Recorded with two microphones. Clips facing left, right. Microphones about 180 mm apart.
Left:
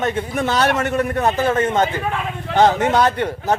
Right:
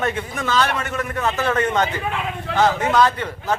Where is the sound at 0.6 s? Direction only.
55° left (ahead or behind).